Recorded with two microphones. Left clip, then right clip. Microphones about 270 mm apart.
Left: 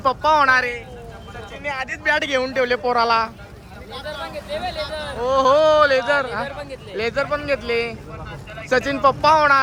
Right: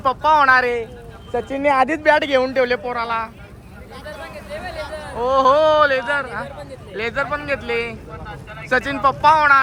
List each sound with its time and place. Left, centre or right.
0.0 s a man's voice: centre
1.5 s speech: centre
2.1 s a man's voice: centre
3.9 s a sound: left
5.2 s a man's voice: centre